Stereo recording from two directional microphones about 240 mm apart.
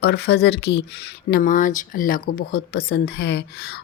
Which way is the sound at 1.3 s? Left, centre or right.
Left.